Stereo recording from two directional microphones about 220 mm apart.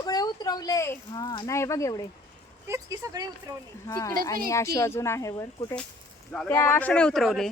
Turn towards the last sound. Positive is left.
turn(degrees=0)  # may be behind; listen again after turning